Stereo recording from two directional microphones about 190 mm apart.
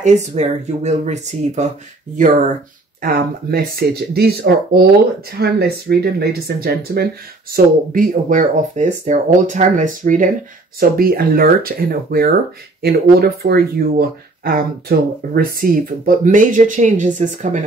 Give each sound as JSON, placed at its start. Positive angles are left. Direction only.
{"t": 0.0, "sound": "speech", "side_deg": -35}
{"t": 10.8, "sound": "speech", "side_deg": -55}